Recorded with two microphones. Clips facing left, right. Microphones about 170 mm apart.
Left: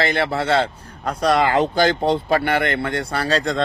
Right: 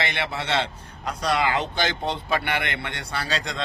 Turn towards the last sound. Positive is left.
turn(degrees=35)  # may be behind; listen again after turning